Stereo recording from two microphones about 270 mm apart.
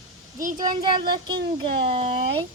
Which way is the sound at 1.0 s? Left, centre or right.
Centre.